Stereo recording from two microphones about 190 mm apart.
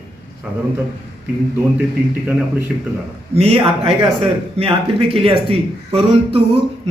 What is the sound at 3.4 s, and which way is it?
A man's voice, 30° right (ahead or behind).